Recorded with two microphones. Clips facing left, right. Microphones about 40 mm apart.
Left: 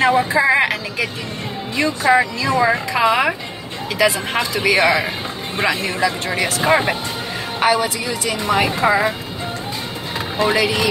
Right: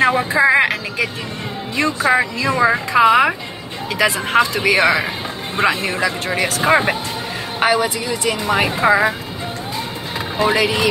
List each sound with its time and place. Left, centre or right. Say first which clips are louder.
0.0 s speech: right 1 dB; centre
2.1 s speech: left 1 dB; centre
8.5 s speech: right 1 dB; centre
10.4 s speech: right 1 dB; centre